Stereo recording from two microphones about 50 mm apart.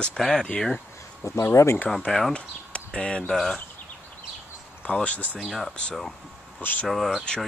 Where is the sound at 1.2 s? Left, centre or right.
Left.